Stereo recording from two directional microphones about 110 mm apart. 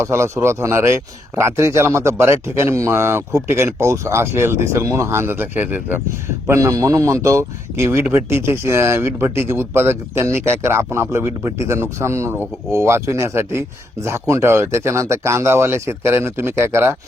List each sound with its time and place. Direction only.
0.0 s speech: 25° right (ahead or behind)
6.5 s speech: 30° right (ahead or behind)